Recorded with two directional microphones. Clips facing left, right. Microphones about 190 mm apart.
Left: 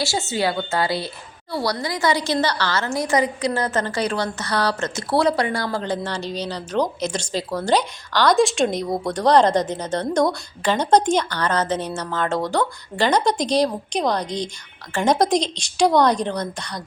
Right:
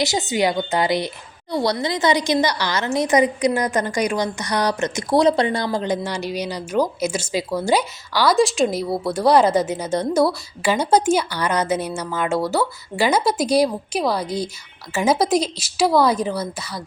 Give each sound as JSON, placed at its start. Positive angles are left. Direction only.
{"t": 0.0, "sound": "a woman's voice", "side_deg": -20}